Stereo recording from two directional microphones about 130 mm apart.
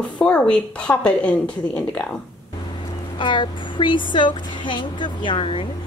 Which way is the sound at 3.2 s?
40° left (ahead or behind).